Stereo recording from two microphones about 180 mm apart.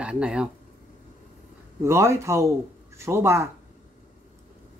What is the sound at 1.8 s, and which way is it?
Speech, 15° right (ahead or behind).